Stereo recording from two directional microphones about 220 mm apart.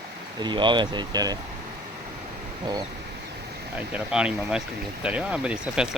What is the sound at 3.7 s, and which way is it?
Speech, 5° right (ahead or behind).